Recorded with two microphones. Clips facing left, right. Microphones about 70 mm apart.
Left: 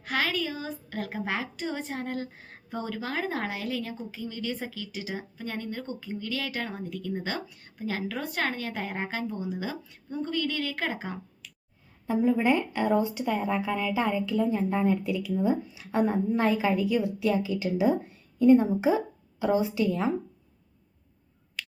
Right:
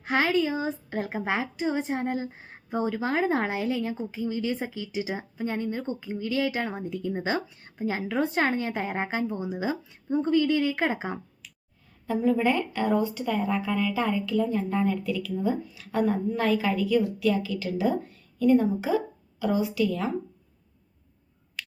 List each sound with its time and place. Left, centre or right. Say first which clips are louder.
0.0 s a woman's voice: right 5 dB; right
12.0 s speech: even; centre